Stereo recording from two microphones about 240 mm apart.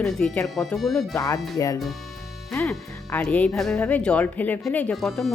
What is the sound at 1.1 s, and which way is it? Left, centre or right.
Speech, centre.